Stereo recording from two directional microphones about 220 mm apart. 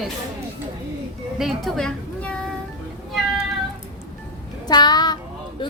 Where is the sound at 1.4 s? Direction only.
Centre (ahead or behind).